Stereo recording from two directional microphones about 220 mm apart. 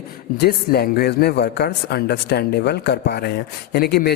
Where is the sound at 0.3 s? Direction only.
45° left (ahead or behind).